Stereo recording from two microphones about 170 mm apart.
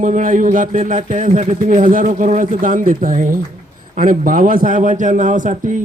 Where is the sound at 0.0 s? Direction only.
50° right (ahead or behind).